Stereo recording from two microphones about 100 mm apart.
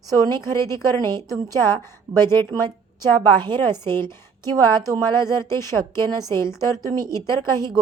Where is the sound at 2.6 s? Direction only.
45° right (ahead or behind).